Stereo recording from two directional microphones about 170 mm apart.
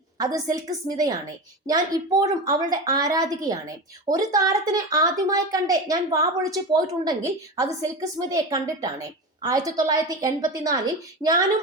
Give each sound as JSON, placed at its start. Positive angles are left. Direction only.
{"t": 0.2, "sound": "a woman's voice", "side_deg": -20}